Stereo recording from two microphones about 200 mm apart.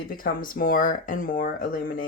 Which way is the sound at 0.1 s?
45° left (ahead or behind).